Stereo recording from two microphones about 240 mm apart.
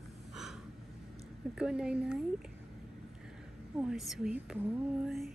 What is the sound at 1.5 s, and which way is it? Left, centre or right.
Speech, centre.